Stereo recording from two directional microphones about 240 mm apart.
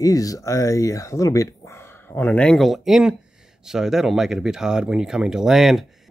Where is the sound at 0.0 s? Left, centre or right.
Centre.